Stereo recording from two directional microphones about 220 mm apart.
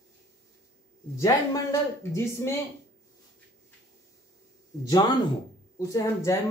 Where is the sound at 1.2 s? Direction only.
15° left (ahead or behind).